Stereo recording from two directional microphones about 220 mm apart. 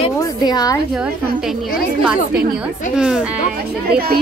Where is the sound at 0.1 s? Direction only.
15° left (ahead or behind).